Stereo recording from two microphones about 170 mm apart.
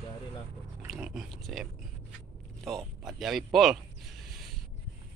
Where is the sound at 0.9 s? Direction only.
Centre (ahead or behind).